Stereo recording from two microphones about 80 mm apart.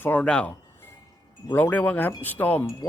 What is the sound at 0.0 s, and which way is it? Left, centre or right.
Speech, centre.